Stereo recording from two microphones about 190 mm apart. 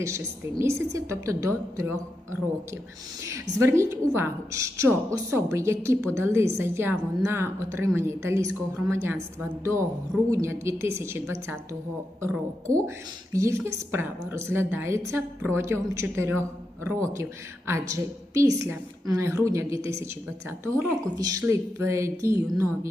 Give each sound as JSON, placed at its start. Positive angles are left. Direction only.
{"t": 0.6, "sound": "a woman's voice", "side_deg": -15}